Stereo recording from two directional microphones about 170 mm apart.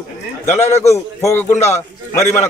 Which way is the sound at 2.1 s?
15° left (ahead or behind).